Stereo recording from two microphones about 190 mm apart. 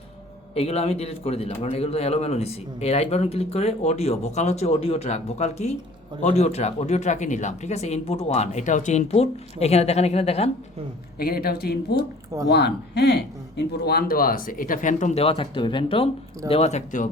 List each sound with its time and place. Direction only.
0.5 s a man's voice: 30° left (ahead or behind)
11.2 s a man's voice: 55° left (ahead or behind)